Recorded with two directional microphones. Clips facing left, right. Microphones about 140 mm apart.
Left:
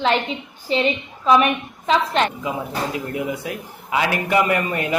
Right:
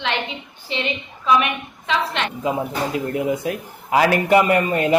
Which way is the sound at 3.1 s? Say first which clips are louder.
Right 4 dB; 30° right (ahead or behind).